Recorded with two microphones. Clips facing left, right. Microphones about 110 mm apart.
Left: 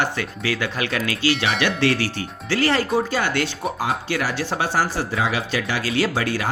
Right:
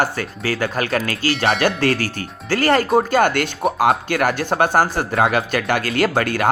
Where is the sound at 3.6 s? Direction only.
70° right (ahead or behind).